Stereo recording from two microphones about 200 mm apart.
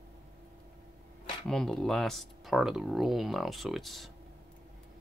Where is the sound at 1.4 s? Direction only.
Centre (ahead or behind).